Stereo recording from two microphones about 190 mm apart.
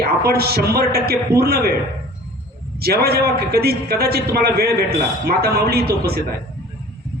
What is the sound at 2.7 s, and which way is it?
A man's voice, 55° right (ahead or behind).